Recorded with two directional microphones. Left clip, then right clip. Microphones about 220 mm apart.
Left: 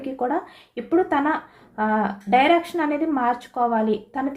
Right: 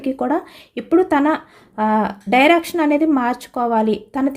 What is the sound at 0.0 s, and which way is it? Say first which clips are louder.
Speech: right 4 dB; 55° right (ahead or behind).